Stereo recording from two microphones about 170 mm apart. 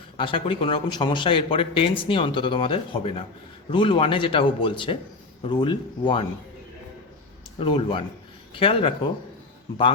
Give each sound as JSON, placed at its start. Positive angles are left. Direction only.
{"t": 0.2, "sound": "a man's voice", "side_deg": 30}
{"t": 7.6, "sound": "a man's voice", "side_deg": 30}